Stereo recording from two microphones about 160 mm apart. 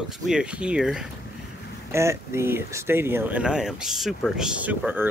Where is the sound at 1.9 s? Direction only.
15° right (ahead or behind).